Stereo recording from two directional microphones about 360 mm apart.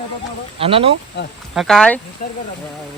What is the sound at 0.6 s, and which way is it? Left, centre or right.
Speech, centre.